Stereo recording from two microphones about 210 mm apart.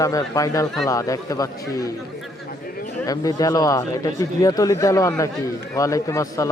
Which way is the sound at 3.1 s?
15° left (ahead or behind).